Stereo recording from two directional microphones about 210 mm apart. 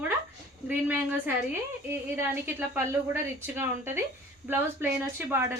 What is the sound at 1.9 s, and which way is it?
A woman's voice, 10° right (ahead or behind).